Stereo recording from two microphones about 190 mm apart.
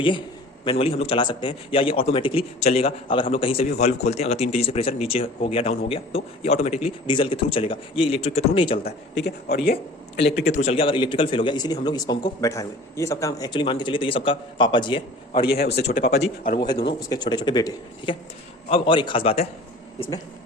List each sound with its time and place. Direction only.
0.6 s a man's voice: 30° left (ahead or behind)
8.8 s a man's voice: 55° left (ahead or behind)
10.6 s speech: 30° left (ahead or behind)
15.4 s a man's voice: 55° left (ahead or behind)
16.8 s speech: 25° left (ahead or behind)
20.0 s speech: 20° left (ahead or behind)